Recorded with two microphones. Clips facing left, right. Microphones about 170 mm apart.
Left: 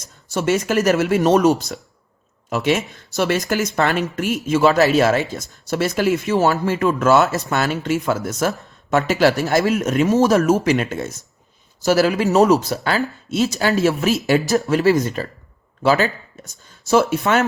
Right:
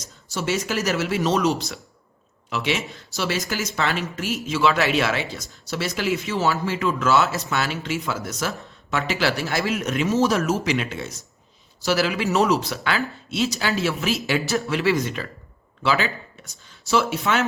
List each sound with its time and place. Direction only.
0.3 s speech: 50° left (ahead or behind)